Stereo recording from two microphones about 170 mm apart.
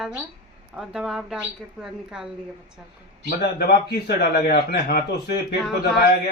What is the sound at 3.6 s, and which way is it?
Speech, 65° left (ahead or behind).